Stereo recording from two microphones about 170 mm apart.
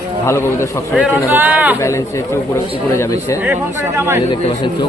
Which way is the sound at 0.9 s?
10° right (ahead or behind).